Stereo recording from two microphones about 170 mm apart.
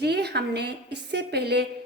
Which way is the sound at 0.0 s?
75° right (ahead or behind).